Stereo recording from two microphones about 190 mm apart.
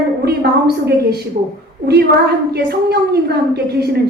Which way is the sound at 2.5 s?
55° right (ahead or behind).